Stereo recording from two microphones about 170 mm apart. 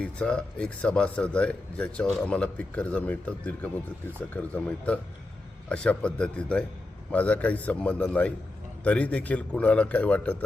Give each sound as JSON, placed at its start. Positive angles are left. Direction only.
{"t": 0.0, "sound": "speech", "side_deg": 5}